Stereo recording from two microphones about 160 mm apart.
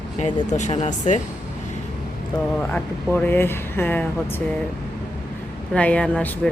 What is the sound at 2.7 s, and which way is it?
Speech, 10° left (ahead or behind).